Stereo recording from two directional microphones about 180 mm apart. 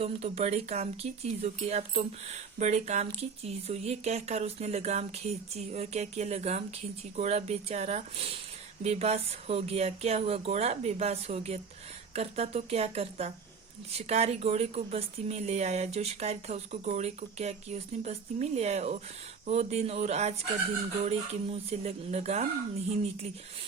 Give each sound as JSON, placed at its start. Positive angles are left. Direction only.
{"t": 0.0, "sound": "speech", "side_deg": -35}